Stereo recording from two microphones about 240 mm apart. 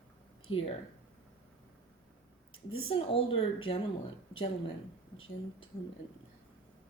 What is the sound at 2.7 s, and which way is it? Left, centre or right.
Speech, left.